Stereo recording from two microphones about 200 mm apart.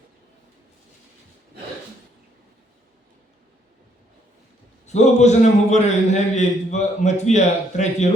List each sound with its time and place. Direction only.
4.9 s a man's voice: 35° left (ahead or behind)